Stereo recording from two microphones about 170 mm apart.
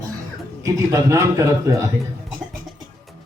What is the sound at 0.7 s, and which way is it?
A man's voice, 15° right (ahead or behind).